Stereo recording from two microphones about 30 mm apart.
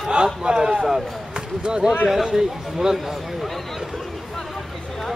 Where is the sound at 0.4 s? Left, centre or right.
Right.